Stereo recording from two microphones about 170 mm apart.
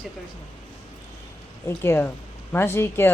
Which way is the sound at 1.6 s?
15° left (ahead or behind).